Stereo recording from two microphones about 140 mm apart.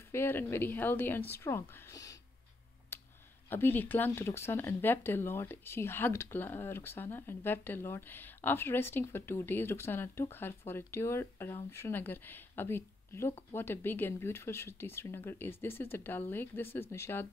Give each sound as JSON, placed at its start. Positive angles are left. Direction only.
{"t": 0.1, "sound": "speech", "side_deg": 15}
{"t": 2.9, "sound": "a sound", "side_deg": 15}
{"t": 3.4, "sound": "speech", "side_deg": 15}